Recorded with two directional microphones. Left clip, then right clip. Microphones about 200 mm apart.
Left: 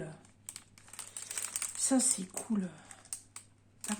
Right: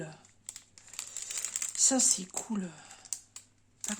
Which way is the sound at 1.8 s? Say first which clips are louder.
Right 3 dB; 40° right (ahead or behind).